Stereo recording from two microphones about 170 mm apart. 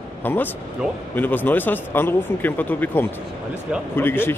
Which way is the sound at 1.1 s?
10° left (ahead or behind).